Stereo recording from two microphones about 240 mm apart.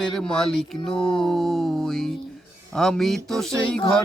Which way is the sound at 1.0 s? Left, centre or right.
Left.